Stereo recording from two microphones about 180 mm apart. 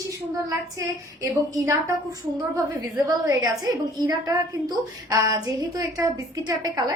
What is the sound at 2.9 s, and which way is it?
A woman's voice, 20° right (ahead or behind).